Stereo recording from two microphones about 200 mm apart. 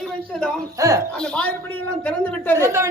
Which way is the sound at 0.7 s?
15° right (ahead or behind).